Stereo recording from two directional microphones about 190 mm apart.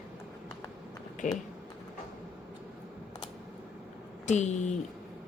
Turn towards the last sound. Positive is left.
turn(degrees=35)  # may be behind; listen again after turning